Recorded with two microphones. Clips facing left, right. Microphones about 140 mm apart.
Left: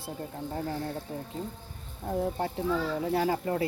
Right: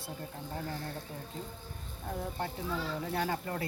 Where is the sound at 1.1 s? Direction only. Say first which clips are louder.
Left 7 dB; 40° left (ahead or behind).